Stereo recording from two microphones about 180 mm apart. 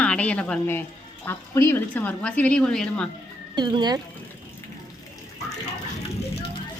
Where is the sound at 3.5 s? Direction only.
25° right (ahead or behind).